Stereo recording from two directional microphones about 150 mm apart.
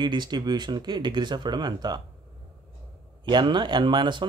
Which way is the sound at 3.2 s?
30° right (ahead or behind).